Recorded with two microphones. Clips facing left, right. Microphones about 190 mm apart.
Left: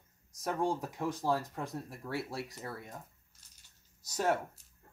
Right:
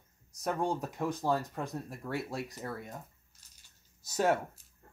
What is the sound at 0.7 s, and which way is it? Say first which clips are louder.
Speech: right 2 dB; centre (ahead or behind).